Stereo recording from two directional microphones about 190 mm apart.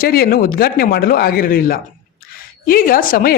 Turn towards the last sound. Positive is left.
turn(degrees=50)  # may be behind; listen again after turning